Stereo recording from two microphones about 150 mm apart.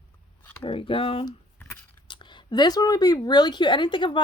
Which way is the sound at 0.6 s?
35° left (ahead or behind).